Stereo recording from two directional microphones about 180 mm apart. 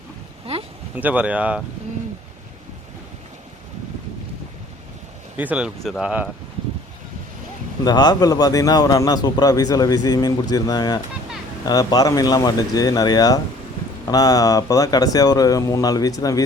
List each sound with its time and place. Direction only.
0.5 s a sound: 35° right (ahead or behind)
0.9 s speech: 10° right (ahead or behind)
5.4 s speech: 10° right (ahead or behind)
7.9 s a man's voice: 25° left (ahead or behind)